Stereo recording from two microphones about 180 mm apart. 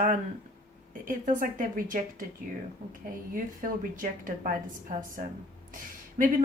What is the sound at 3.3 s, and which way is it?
Speech, 50° right (ahead or behind).